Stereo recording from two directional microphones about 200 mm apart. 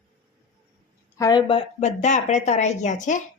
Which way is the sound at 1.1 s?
20° left (ahead or behind).